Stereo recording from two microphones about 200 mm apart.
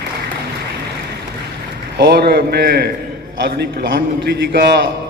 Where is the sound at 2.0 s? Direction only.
50° right (ahead or behind).